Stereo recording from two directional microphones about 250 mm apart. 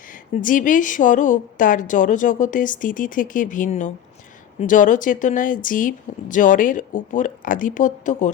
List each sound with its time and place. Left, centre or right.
0.1 s speech: left